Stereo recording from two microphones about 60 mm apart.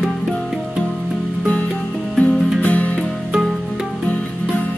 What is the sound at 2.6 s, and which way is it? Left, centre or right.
Music, left.